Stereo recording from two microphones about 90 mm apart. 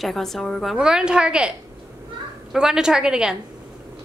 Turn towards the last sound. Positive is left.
turn(degrees=-10)  # may be behind; listen again after turning